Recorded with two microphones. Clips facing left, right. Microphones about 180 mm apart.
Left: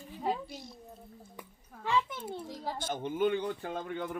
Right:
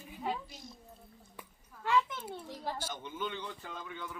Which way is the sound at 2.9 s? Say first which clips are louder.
Left 10 dB; 55° left (ahead or behind).